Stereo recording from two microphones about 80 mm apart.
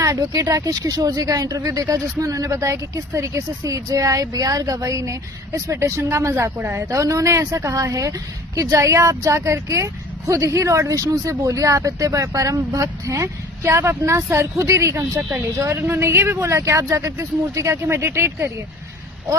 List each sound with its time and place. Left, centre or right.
0.0 s speech: right
6.9 s speech: right